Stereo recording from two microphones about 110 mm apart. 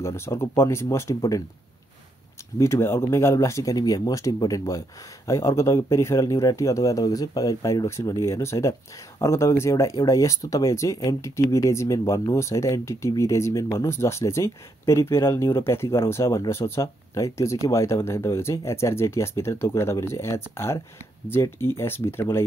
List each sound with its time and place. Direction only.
0.0 s speech: 25° left (ahead or behind)
2.6 s speech: 25° left (ahead or behind)